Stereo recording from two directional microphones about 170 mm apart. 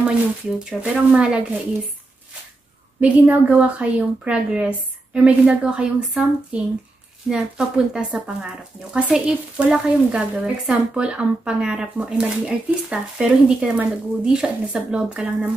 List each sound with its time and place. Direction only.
0.7 s speech: 5° right (ahead or behind)
3.0 s a woman's voice: 10° right (ahead or behind)